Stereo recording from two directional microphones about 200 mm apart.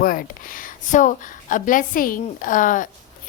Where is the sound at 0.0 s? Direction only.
45° left (ahead or behind).